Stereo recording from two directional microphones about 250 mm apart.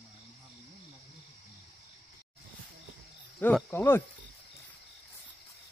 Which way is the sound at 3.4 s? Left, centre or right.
Centre.